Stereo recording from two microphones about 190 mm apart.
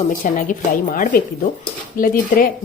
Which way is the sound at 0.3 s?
45° left (ahead or behind).